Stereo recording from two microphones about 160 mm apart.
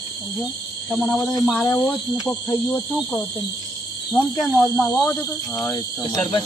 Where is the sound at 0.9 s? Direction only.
Centre (ahead or behind).